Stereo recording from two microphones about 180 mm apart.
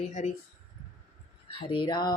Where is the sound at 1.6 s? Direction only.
25° left (ahead or behind).